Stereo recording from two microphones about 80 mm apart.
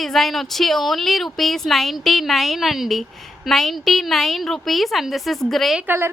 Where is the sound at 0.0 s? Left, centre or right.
Centre.